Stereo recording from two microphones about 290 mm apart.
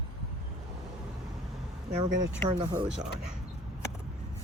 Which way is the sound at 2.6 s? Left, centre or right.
Centre.